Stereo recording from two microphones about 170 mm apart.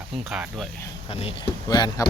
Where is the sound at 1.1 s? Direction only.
35° left (ahead or behind).